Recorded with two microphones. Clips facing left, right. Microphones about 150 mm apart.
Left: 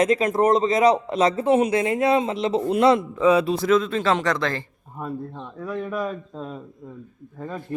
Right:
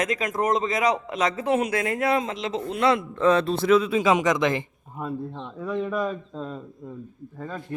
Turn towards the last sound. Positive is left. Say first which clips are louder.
# left 2 dB
turn(degrees=0)  # may be behind; listen again after turning